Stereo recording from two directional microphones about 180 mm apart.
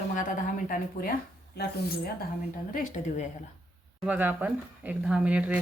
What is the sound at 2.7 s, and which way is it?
Speech, 45° left (ahead or behind).